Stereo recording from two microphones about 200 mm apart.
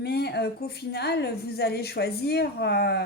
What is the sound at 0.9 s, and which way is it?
A woman's voice, 55° left (ahead or behind).